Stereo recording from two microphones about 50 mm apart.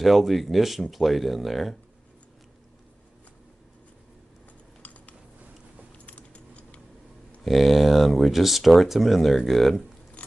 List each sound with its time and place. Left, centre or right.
0.0 s speech: centre
4.8 s a sound: left
6.0 s keys jangling: left
7.4 s speech: centre